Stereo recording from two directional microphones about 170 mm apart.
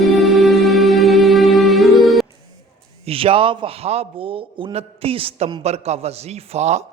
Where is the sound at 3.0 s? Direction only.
35° right (ahead or behind).